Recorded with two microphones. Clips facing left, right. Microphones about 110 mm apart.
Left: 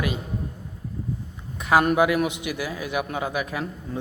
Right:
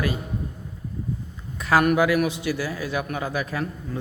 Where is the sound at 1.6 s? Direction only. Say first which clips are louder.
Even; 20° left (ahead or behind).